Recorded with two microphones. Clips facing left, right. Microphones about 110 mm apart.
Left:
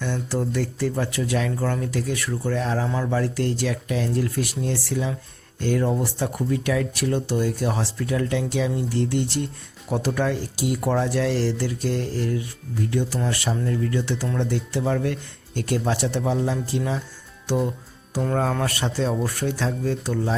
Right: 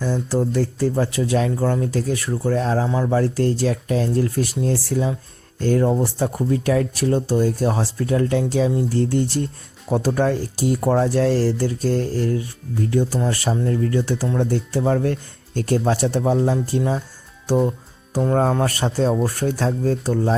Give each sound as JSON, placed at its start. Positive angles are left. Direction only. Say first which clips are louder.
{"t": 0.0, "sound": "speech", "louder": "right 5 dB", "side_deg": -35}
{"t": 18.1, "sound": "speech", "louder": "right 5 dB", "side_deg": -35}